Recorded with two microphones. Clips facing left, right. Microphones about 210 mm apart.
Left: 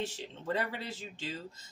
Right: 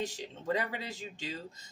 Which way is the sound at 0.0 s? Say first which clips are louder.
Right 1 dB; 10° right (ahead or behind).